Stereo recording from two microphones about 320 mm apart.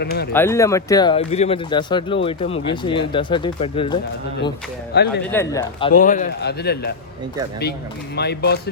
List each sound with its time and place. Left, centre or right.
0.0 s a man's voice: left
0.3 s speech: centre
5.2 s speech: centre
6.0 s a man's voice: left
8.1 s speech: left